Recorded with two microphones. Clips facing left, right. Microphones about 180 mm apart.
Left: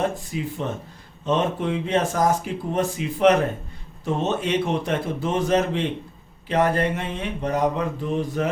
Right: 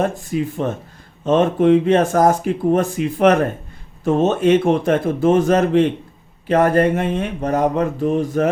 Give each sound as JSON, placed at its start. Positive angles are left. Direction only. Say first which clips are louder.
{"t": 0.3, "sound": "speech", "louder": "right 7 dB", "side_deg": -55}